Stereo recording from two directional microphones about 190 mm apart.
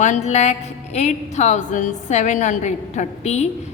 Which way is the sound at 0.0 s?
35° left (ahead or behind).